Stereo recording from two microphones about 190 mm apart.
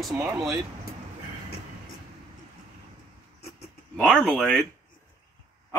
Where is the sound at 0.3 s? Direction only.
5° right (ahead or behind).